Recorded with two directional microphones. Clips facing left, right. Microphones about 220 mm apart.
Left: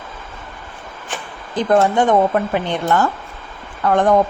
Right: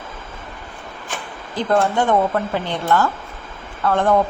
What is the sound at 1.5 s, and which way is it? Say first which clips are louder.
A woman's voice: left 3 dB; 20° left (ahead or behind).